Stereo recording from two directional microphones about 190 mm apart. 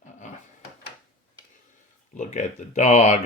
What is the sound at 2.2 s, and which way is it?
Speech, 40° left (ahead or behind).